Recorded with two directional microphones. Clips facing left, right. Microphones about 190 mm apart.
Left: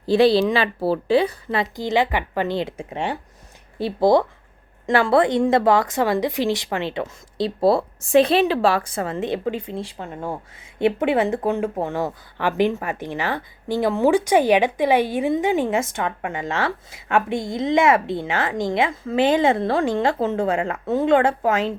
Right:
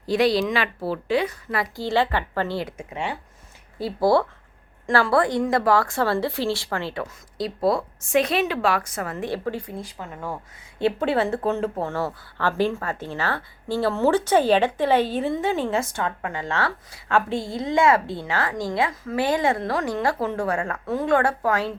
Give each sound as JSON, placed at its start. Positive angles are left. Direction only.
{"t": 0.0, "sound": "speech", "side_deg": 30}
{"t": 2.7, "sound": "speech", "side_deg": 30}